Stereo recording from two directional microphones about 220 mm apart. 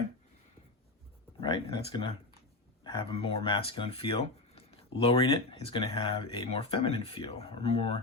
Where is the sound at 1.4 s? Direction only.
20° left (ahead or behind).